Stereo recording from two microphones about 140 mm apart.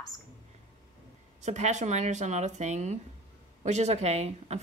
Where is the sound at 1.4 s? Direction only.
55° right (ahead or behind).